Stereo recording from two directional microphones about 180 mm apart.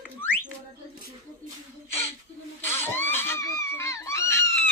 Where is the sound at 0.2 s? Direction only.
10° left (ahead or behind).